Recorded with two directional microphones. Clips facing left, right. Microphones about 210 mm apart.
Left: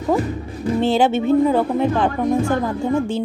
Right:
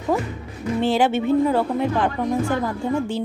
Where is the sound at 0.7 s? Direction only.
25° left (ahead or behind).